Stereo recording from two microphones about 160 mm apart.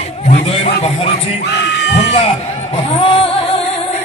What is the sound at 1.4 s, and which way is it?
Yell, 90° left.